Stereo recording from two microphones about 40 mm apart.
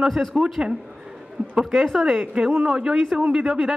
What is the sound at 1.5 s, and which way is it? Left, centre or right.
Speech, centre.